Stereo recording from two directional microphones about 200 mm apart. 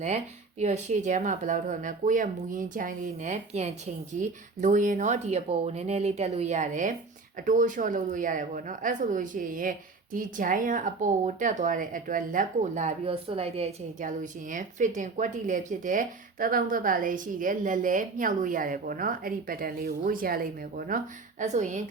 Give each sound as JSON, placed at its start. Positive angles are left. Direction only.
{"t": 0.6, "sound": "a woman's voice", "side_deg": -35}